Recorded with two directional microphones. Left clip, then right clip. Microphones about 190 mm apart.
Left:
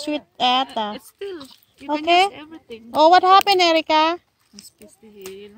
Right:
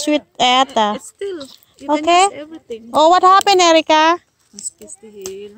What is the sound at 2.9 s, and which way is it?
Speech, 15° right (ahead or behind).